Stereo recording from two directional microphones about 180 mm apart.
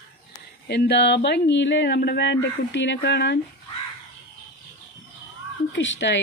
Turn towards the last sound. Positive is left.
turn(degrees=85)